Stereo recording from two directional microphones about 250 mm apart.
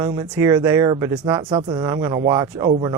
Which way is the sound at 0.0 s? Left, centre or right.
Centre.